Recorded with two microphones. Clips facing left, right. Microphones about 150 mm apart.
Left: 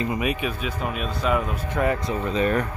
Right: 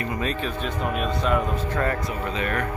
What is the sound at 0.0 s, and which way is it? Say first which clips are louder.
Speech: left 2 dB; 15° left (ahead or behind).